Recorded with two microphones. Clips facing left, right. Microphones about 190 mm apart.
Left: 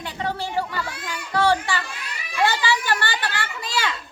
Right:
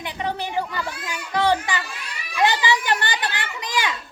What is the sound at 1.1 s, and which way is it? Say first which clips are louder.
Children playing: even; 15° right (ahead or behind).